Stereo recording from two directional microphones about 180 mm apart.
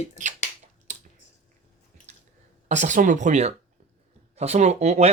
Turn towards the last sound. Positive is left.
turn(degrees=-35)  # may be behind; listen again after turning